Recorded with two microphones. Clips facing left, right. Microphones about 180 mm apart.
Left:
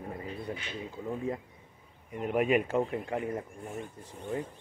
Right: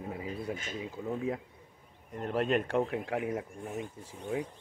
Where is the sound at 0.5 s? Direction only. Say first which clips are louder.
Right 1 dB; 45° right (ahead or behind).